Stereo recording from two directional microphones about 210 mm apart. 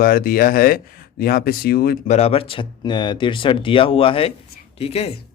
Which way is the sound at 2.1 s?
30° left (ahead or behind).